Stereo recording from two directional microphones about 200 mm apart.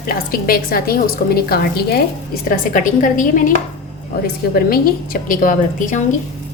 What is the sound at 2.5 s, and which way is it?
A woman's voice, 40° left (ahead or behind).